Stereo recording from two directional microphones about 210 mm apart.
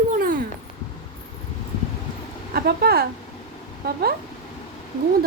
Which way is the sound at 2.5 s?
50° right (ahead or behind).